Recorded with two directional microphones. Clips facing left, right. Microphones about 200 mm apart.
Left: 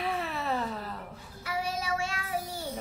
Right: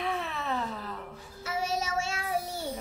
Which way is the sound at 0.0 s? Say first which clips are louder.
Left 1 dB; 5° left (ahead or behind).